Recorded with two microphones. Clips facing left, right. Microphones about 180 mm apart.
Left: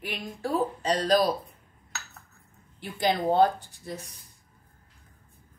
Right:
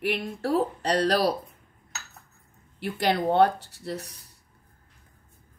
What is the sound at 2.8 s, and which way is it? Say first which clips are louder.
A woman's voice: right 1 dB; 70° right (ahead or behind).